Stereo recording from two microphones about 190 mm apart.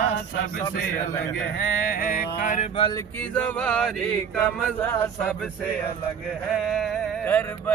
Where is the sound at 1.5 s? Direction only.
50° left (ahead or behind).